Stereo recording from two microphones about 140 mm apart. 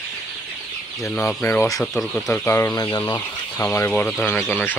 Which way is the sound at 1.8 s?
5° left (ahead or behind).